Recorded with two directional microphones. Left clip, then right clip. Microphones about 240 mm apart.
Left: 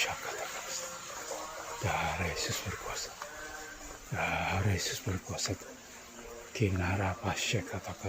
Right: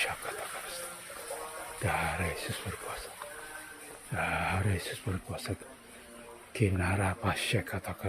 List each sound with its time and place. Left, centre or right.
1.8 s music: centre
4.1 s speech: centre